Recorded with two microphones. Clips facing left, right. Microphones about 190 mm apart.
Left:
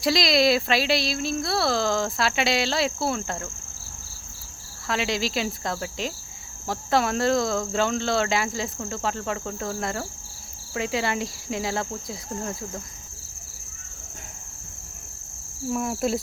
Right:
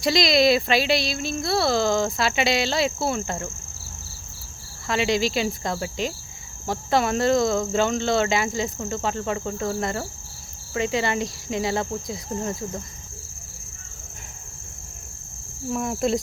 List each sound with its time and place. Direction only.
0.0 s speech: centre (ahead or behind)
4.9 s speech: centre (ahead or behind)
15.7 s speech: 5° left (ahead or behind)